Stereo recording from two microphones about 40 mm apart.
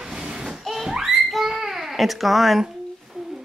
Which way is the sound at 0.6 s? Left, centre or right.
Centre.